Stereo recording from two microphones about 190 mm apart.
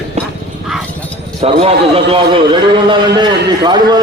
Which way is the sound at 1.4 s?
30° right (ahead or behind).